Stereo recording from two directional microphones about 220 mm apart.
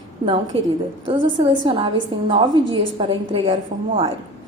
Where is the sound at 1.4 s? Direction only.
20° right (ahead or behind).